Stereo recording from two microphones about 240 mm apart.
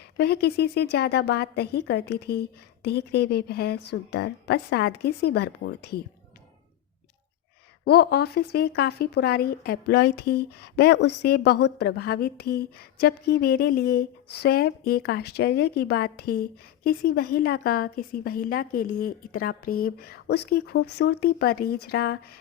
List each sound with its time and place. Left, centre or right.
0.2 s a woman's voice: left
7.9 s speech: left